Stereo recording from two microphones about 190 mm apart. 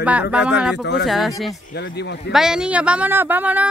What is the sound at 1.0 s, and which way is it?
Speech, centre (ahead or behind).